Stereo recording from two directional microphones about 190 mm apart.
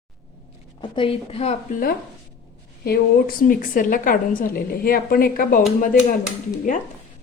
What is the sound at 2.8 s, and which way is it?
A woman's voice, 50° left (ahead or behind).